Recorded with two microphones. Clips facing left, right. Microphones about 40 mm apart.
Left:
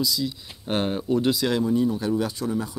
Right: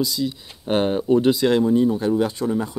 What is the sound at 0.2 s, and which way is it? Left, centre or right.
Speech, centre.